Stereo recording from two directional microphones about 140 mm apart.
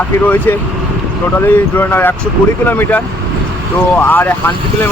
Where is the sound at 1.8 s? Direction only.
15° left (ahead or behind).